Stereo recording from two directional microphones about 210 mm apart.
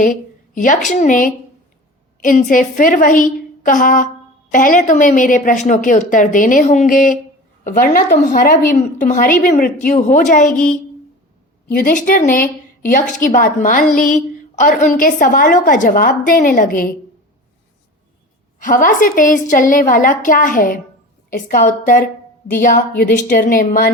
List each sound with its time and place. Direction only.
0.0 s a woman's voice: 40° left (ahead or behind)
11.7 s a woman's voice: 45° left (ahead or behind)
18.6 s a woman's voice: 40° left (ahead or behind)